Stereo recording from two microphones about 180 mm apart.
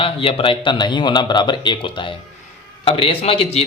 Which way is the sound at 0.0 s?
30° left (ahead or behind).